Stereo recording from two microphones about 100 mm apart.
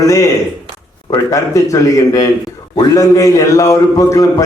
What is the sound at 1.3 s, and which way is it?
A man's voice, 35° left (ahead or behind).